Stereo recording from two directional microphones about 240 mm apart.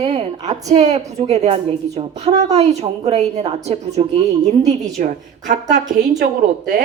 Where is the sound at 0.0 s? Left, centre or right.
Right.